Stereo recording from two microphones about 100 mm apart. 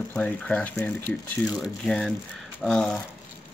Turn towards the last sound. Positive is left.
turn(degrees=10)  # may be behind; listen again after turning